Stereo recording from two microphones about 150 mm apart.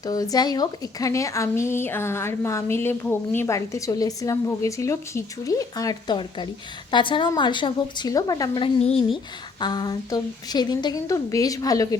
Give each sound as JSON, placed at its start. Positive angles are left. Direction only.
{"t": 0.0, "sound": "a woman's voice", "side_deg": 25}
{"t": 9.6, "sound": "speech", "side_deg": 30}